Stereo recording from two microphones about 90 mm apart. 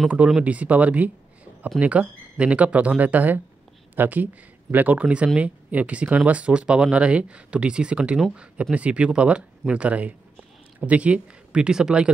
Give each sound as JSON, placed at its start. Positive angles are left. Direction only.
{"t": 0.4, "sound": "speech", "side_deg": -15}